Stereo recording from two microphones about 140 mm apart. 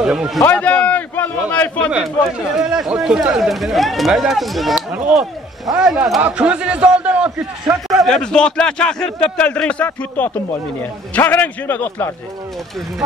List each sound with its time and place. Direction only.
0.0 s a man's voice: 5° right (ahead or behind)
0.4 s a sound: 10° left (ahead or behind)
1.5 s a man's voice: 10° left (ahead or behind)
1.9 s speech: 5° right (ahead or behind)
7.2 s a man's voice: 20° right (ahead or behind)
8.0 s a man's voice: 5° left (ahead or behind)